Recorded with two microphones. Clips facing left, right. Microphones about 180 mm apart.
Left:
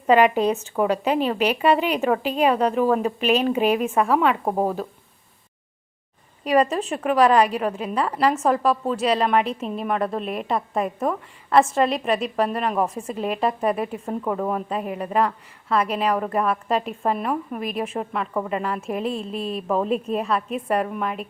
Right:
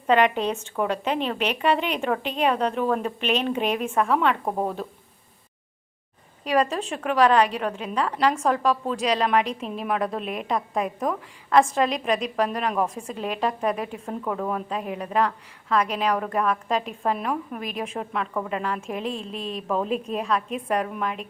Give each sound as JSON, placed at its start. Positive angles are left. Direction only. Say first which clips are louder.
{"t": 0.1, "sound": "speech", "louder": "left 4 dB", "side_deg": 10}
{"t": 4.4, "sound": "speech", "louder": "left 4 dB", "side_deg": 25}
{"t": 6.4, "sound": "a woman's voice", "louder": "left 3 dB", "side_deg": 10}